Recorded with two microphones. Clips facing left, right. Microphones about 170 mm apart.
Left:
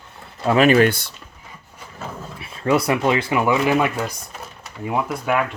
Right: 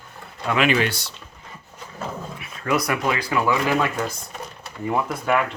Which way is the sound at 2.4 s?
30° left (ahead or behind).